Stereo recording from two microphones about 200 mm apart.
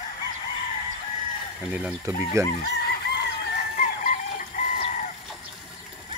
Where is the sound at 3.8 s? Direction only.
40° left (ahead or behind).